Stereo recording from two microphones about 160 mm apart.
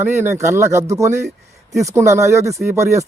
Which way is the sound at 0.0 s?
15° right (ahead or behind).